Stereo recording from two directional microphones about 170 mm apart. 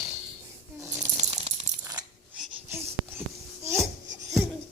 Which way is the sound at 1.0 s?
40° right (ahead or behind).